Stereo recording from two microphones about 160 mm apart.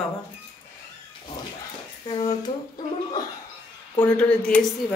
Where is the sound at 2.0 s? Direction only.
25° left (ahead or behind).